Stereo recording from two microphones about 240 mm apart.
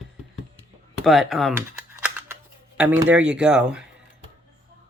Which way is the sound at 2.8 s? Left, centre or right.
Centre.